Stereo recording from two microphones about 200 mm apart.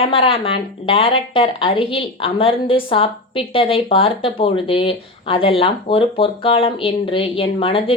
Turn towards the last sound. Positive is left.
turn(degrees=25)  # may be behind; listen again after turning